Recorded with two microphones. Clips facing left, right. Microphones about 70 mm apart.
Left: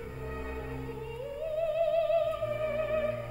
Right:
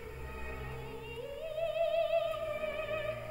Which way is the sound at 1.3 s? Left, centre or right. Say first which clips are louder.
Left 5 dB; left.